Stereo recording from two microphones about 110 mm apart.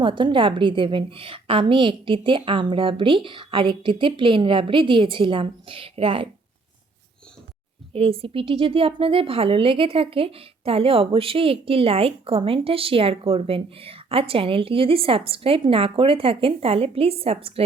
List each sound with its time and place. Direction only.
0.0 s a woman's voice: 50° right (ahead or behind)
7.9 s speech: 60° right (ahead or behind)